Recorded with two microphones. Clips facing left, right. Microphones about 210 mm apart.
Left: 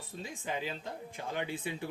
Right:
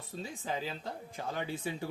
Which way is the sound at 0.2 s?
35° right (ahead or behind).